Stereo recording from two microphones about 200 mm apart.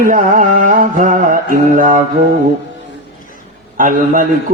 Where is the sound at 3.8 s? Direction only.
40° right (ahead or behind).